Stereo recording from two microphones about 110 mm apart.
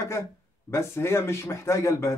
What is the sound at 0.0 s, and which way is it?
Speech, 25° left (ahead or behind).